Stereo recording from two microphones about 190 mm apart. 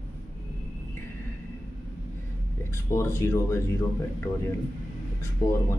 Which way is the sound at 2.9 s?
15° left (ahead or behind).